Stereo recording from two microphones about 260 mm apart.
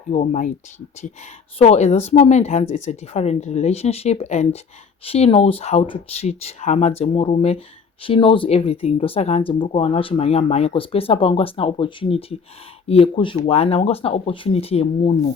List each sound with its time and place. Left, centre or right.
0.1 s speech: left
1.5 s speech: left